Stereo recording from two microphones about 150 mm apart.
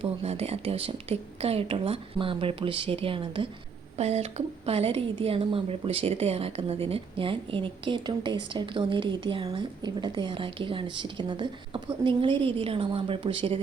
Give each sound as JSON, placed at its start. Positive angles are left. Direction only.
{"t": 0.0, "sound": "a woman's voice", "side_deg": -45}
{"t": 3.9, "sound": "a woman's voice", "side_deg": -45}